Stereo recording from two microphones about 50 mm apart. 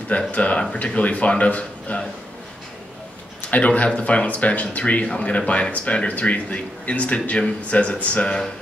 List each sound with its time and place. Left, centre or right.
0.3 s speech: left
3.4 s speech: left